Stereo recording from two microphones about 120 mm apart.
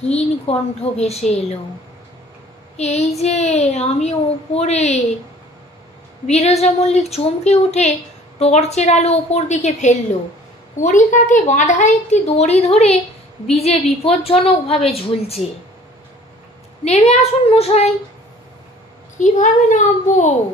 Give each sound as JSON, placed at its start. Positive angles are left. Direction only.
{"t": 0.1, "sound": "a woman's voice", "side_deg": 60}
{"t": 2.8, "sound": "a woman's voice", "side_deg": 70}
{"t": 6.2, "sound": "a woman's voice", "side_deg": 65}
{"t": 10.8, "sound": "a woman's voice", "side_deg": 90}
{"t": 16.8, "sound": "a woman's voice", "side_deg": 65}
{"t": 19.1, "sound": "a woman's voice", "side_deg": 90}